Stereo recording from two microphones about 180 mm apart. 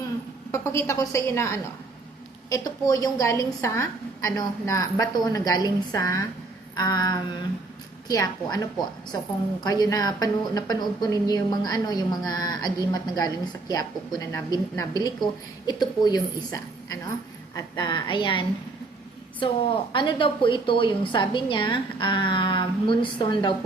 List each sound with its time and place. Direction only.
0.5 s a woman's voice: 15° left (ahead or behind)